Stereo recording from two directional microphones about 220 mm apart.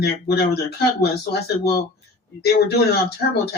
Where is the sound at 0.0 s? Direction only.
45° left (ahead or behind).